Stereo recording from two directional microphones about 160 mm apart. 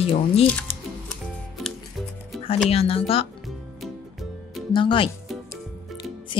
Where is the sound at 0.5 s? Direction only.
10° left (ahead or behind).